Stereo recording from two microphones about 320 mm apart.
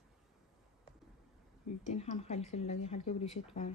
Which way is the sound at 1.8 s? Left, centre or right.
Left.